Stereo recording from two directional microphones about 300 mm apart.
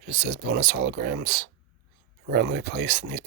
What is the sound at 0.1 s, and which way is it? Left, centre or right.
Speech, right.